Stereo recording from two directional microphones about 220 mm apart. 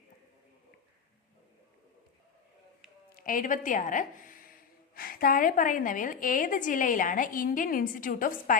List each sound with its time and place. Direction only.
3.2 s a woman's voice: 40° left (ahead or behind)